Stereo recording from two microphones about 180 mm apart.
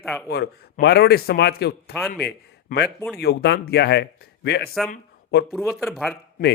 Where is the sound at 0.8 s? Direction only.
65° left (ahead or behind).